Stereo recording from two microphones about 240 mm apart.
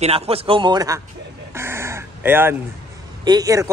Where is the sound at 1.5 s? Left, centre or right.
Centre.